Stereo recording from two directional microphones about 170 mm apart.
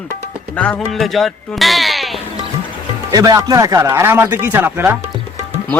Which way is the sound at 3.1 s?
20° right (ahead or behind).